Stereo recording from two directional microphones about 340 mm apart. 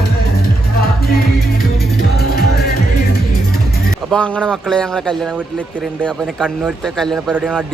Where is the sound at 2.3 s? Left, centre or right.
Left.